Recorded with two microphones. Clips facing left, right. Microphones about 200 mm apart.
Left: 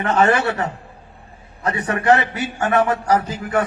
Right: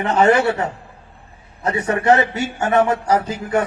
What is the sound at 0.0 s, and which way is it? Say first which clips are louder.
A man's voice: right 2 dB; 20° right (ahead or behind).